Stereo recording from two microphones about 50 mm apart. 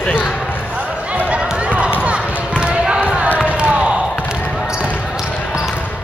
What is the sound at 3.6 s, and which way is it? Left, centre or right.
Basketball bounce, right.